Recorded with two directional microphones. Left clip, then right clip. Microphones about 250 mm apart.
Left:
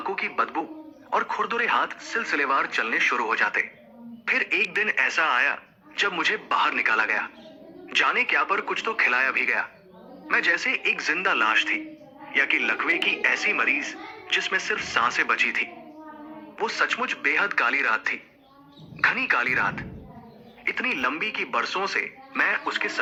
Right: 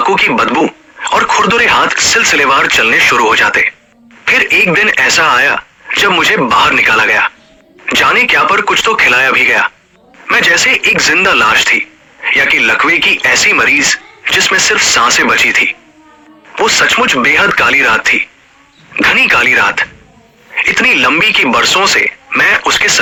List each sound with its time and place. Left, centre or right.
0.0 s speech: right